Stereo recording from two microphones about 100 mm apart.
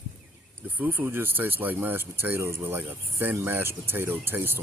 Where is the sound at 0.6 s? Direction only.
20° right (ahead or behind).